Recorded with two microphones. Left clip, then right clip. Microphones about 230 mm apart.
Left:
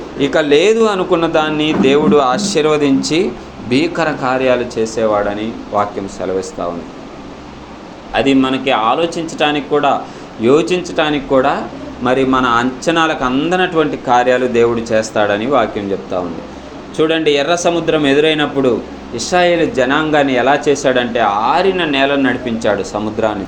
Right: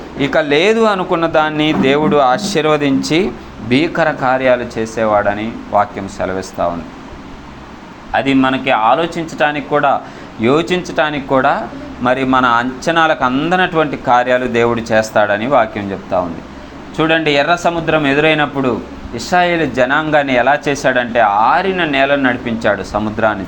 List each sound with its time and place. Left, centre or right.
0.2 s speech: right
8.1 s speech: right
17.0 s speech: right